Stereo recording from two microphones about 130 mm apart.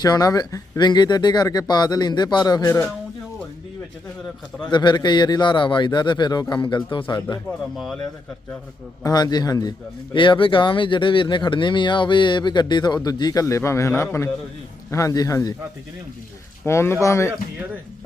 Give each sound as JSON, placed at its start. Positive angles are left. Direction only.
{"t": 0.0, "sound": "a man's voice", "side_deg": 30}
{"t": 4.7, "sound": "a man's voice", "side_deg": 35}
{"t": 9.0, "sound": "a man's voice", "side_deg": 30}
{"t": 16.6, "sound": "a man's voice", "side_deg": 20}